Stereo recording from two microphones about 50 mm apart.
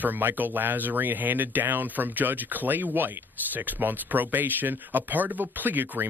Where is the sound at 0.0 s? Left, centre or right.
Right.